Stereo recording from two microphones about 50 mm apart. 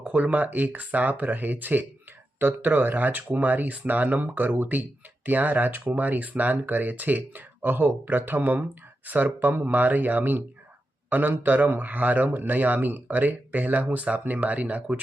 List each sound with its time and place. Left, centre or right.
0.0 s speech: right